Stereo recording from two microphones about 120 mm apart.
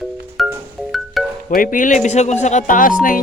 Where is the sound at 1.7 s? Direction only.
90° left.